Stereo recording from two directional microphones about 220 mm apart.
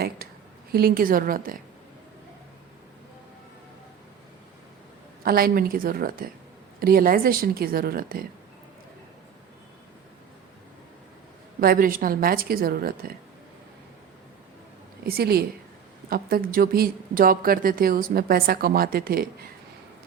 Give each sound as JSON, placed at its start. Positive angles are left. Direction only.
{"t": 0.2, "sound": "a sound", "side_deg": -45}
{"t": 0.7, "sound": "a woman's voice", "side_deg": -45}
{"t": 5.2, "sound": "a woman's voice", "side_deg": -40}
{"t": 11.6, "sound": "a woman's voice", "side_deg": -40}
{"t": 15.0, "sound": "a woman's voice", "side_deg": -45}